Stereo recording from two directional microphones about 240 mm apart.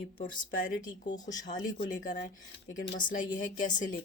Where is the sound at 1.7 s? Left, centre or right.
Left.